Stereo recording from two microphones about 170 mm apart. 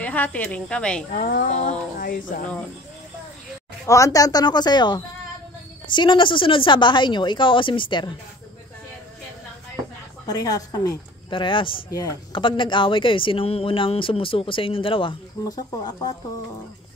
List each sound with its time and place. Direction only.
0.0 s speech: 10° left (ahead or behind)
1.1 s speech: 55° left (ahead or behind)
2.0 s speech: 55° left (ahead or behind)
3.8 s speech: 20° left (ahead or behind)
10.2 s speech: 20° left (ahead or behind)